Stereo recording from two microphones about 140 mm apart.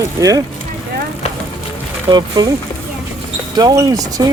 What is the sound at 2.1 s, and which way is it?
Speech, 30° right (ahead or behind).